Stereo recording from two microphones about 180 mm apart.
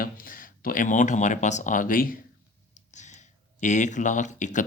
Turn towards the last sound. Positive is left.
turn(degrees=45)  # may be behind; listen again after turning